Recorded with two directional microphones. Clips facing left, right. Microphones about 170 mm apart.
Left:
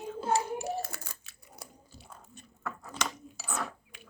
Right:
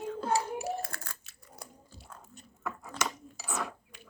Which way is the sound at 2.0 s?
20° left (ahead or behind).